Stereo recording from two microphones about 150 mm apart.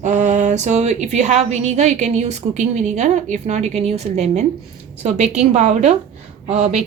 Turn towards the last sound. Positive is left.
turn(degrees=-50)  # may be behind; listen again after turning